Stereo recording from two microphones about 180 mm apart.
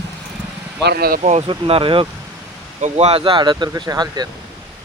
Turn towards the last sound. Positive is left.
turn(degrees=-25)  # may be behind; listen again after turning